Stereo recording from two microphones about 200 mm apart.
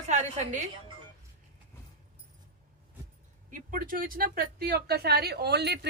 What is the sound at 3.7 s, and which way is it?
Speech, 45° right (ahead or behind).